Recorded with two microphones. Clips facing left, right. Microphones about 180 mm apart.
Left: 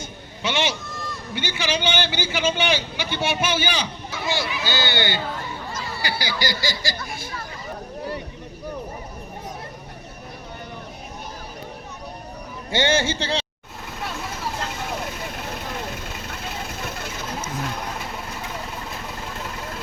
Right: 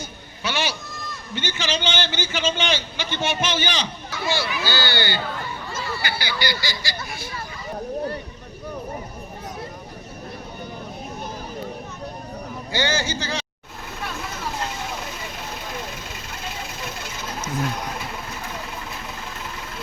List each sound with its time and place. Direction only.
0.4 s a man's voice: 20° left (ahead or behind)
1.3 s a man's voice: 10° left (ahead or behind)
6.0 s speech: 35° left (ahead or behind)
12.7 s a man's voice: 25° left (ahead or behind)